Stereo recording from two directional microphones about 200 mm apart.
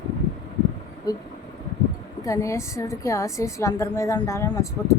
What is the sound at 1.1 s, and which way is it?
Speech, 20° left (ahead or behind).